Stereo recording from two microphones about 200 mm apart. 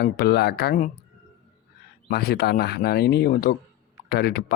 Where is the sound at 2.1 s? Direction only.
50° left (ahead or behind).